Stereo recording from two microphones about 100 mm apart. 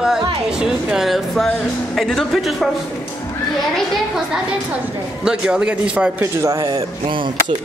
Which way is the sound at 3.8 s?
5° right (ahead or behind).